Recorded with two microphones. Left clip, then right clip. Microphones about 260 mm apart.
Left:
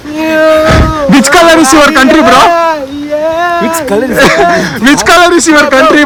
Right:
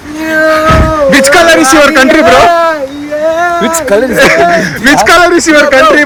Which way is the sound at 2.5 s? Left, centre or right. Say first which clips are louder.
Even; left.